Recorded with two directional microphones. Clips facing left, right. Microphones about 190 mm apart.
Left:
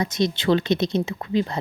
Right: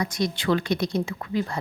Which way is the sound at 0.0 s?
25° left (ahead or behind).